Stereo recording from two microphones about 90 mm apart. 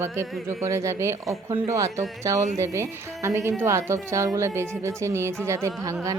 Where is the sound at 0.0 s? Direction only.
30° right (ahead or behind).